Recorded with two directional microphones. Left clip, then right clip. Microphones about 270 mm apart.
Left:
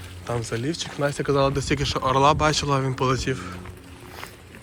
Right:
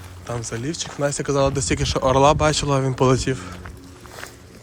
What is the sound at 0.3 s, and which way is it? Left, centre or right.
Speech, centre.